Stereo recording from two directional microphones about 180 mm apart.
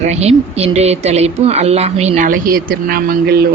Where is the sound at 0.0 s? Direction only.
35° right (ahead or behind).